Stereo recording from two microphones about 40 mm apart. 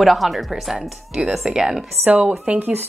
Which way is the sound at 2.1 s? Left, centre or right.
Right.